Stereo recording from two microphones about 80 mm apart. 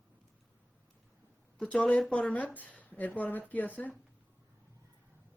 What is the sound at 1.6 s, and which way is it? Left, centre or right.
Speech, centre.